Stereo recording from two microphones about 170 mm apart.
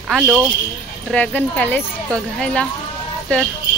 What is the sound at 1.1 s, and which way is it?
Speech, 10° left (ahead or behind).